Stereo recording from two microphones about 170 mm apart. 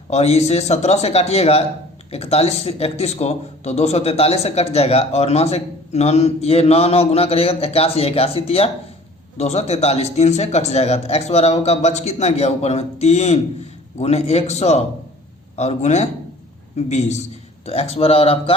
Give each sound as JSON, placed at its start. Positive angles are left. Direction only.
{"t": 0.1, "sound": "a man's voice", "side_deg": 40}